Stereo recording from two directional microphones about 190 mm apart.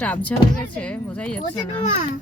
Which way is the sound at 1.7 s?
30° left (ahead or behind).